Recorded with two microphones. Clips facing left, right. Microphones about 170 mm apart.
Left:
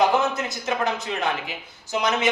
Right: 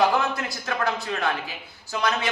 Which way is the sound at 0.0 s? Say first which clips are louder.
Left 2 dB; 20° left (ahead or behind).